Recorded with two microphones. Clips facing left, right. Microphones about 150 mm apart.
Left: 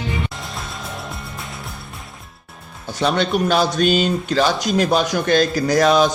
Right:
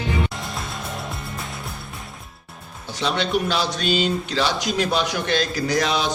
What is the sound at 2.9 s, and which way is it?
A man's voice, 50° left (ahead or behind).